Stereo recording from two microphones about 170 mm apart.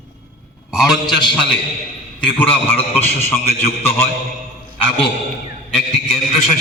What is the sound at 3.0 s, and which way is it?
Speech, 40° left (ahead or behind).